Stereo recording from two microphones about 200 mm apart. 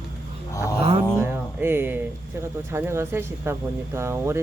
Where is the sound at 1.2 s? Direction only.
10° right (ahead or behind).